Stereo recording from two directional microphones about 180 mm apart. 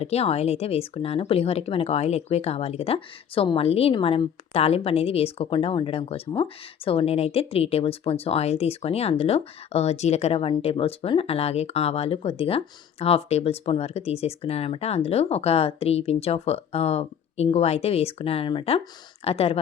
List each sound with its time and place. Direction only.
0.0 s speech: 35° left (ahead or behind)